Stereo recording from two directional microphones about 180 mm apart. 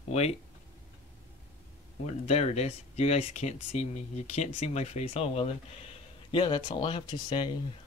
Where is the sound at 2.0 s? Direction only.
40° left (ahead or behind).